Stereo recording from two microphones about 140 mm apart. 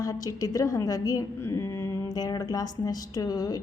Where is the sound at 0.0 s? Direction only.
25° left (ahead or behind).